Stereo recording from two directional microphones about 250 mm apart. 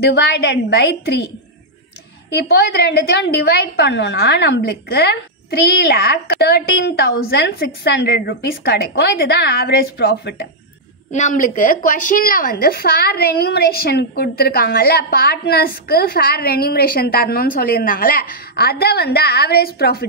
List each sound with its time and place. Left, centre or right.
0.0 s a woman's voice: left
2.3 s a woman's voice: left
11.1 s a woman's voice: left